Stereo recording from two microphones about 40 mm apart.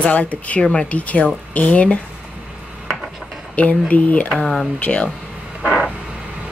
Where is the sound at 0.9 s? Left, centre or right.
Left.